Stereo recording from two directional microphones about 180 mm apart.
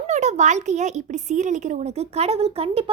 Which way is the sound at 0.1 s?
40° right (ahead or behind).